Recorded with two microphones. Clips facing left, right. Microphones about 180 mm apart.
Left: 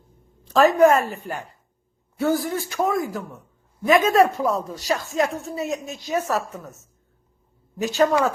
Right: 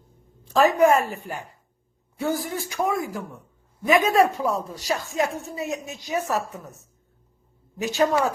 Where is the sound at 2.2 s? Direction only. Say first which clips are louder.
Left 4 dB; 15° right (ahead or behind).